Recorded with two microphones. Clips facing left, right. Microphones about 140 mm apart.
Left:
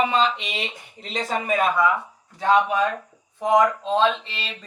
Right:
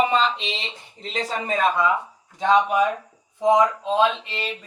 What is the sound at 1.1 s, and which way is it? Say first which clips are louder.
Speech: left 1 dB; 40° left (ahead or behind).